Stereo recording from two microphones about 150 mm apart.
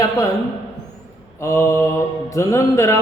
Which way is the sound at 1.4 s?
20° left (ahead or behind).